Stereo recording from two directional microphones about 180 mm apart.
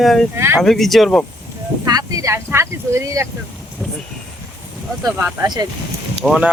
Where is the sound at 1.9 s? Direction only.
20° right (ahead or behind).